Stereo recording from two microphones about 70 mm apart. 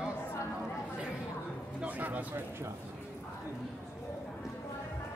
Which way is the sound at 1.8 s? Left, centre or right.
Right.